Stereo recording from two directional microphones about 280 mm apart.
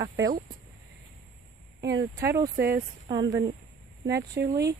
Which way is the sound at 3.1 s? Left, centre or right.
Centre.